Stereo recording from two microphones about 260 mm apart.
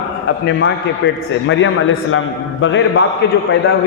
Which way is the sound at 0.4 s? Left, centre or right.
Left.